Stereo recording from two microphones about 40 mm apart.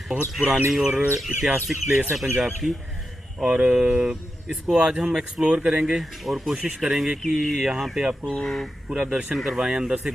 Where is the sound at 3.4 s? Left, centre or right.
Right.